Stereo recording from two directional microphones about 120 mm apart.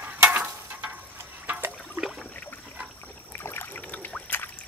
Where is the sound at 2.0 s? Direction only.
Centre (ahead or behind).